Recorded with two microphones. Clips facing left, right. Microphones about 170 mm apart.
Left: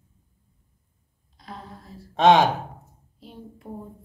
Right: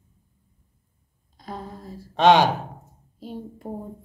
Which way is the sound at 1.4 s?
40° right (ahead or behind).